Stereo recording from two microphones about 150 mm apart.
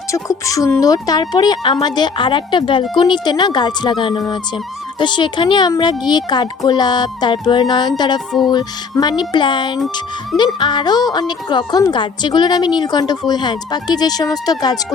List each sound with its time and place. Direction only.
0.1 s speech: 20° left (ahead or behind)